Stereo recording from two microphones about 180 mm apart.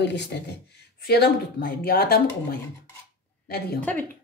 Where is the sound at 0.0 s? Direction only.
75° left (ahead or behind).